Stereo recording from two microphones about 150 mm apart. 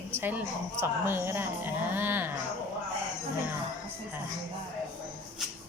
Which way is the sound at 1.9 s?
15° right (ahead or behind).